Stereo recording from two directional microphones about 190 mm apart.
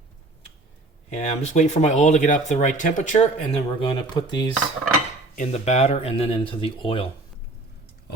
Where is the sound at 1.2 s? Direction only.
35° left (ahead or behind).